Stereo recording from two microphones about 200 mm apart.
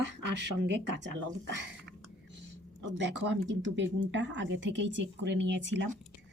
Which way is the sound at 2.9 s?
65° right (ahead or behind).